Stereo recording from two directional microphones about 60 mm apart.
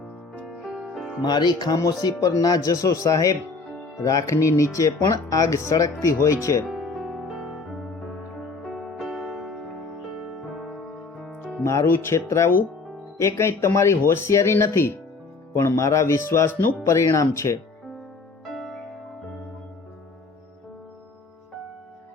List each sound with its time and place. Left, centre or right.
0.4 s music: centre
1.5 s speech: left
5.7 s speech: left
6.7 s music: centre
11.6 s speech: left
18.4 s music: centre